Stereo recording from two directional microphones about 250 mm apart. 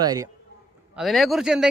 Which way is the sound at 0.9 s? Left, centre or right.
Centre.